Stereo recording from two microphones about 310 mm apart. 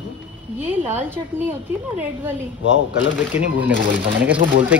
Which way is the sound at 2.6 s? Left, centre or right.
Left.